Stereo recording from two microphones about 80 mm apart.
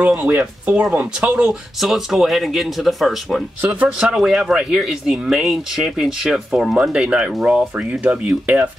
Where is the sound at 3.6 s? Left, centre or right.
Centre.